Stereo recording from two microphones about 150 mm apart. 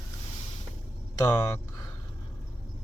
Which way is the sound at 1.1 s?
25° left (ahead or behind).